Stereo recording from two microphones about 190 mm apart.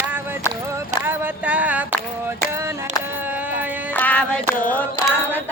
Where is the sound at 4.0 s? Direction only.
5° left (ahead or behind).